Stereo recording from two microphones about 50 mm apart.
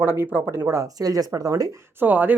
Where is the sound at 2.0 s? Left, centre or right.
Right.